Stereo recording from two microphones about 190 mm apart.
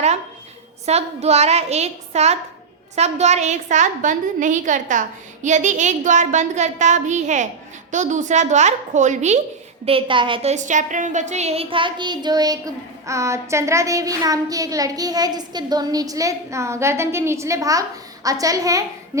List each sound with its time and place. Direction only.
0.9 s a woman's voice: 35° right (ahead or behind)
9.8 s a woman's voice: 30° right (ahead or behind)